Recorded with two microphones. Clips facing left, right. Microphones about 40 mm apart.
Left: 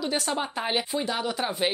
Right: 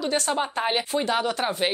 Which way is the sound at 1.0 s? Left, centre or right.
Right.